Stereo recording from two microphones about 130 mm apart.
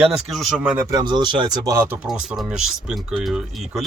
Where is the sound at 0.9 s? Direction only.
30° right (ahead or behind).